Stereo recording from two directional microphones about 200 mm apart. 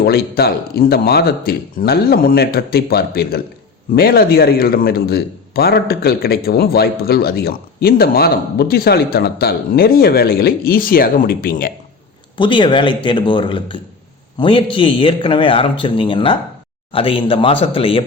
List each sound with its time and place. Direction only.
0.0 s a man's voice: 50° left (ahead or behind)
12.4 s speech: 25° left (ahead or behind)